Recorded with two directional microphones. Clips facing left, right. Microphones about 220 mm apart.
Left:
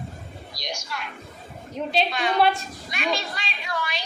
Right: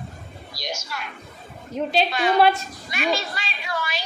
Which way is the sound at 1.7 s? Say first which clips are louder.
Right 3 dB; centre (ahead or behind).